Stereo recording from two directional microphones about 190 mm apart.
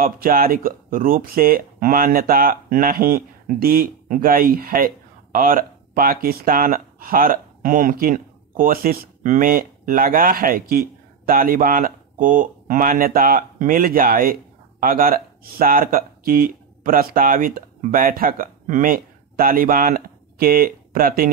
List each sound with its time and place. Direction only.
0.0 s speech: 50° right (ahead or behind)